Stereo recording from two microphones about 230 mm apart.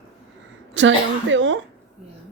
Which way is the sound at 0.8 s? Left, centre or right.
Right.